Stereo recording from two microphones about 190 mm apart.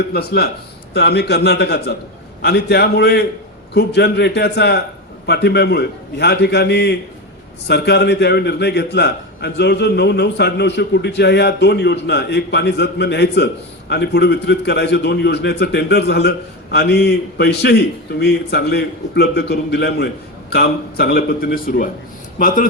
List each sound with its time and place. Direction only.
0.1 s a man's voice: 55° left (ahead or behind)